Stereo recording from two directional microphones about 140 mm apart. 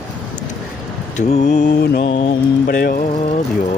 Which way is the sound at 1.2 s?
55° left (ahead or behind).